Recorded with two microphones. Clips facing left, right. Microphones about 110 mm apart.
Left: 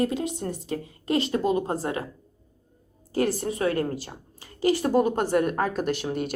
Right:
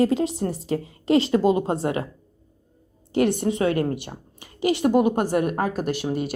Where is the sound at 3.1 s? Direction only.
20° right (ahead or behind); by 6.3 s 5° right (ahead or behind).